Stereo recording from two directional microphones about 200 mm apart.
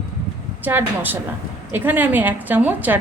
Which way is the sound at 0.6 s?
10° right (ahead or behind).